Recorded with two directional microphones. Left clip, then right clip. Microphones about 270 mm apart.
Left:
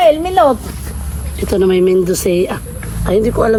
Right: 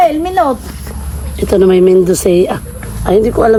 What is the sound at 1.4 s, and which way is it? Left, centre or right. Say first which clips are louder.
Speech: right 4 dB; right.